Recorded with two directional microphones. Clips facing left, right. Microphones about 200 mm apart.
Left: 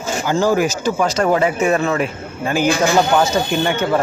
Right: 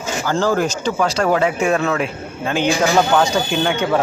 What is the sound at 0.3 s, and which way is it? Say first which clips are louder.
Speech: left 2 dB; 10° left (ahead or behind).